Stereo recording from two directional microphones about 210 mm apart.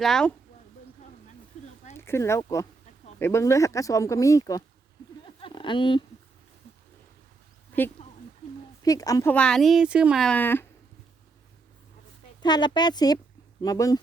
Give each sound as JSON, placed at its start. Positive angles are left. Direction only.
{"t": 0.0, "sound": "speech", "side_deg": 5}
{"t": 2.0, "sound": "speech", "side_deg": 10}
{"t": 5.4, "sound": "a sound", "side_deg": 25}
{"t": 7.7, "sound": "speech", "side_deg": 10}
{"t": 12.4, "sound": "speech", "side_deg": 20}